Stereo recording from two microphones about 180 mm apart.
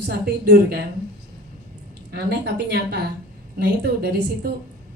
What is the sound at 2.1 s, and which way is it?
A woman's voice, 60° right (ahead or behind).